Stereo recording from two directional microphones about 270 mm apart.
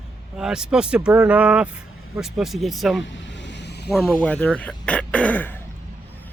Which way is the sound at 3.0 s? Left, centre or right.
Left.